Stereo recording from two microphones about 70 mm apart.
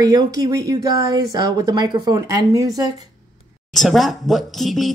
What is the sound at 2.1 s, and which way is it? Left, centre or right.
Speech, right.